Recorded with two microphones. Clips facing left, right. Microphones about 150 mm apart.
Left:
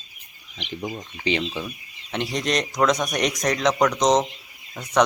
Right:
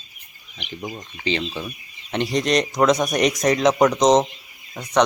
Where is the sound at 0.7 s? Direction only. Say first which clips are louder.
Left 1 dB; 10° right (ahead or behind).